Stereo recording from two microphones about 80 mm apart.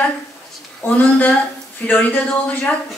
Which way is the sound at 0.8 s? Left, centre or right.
Left.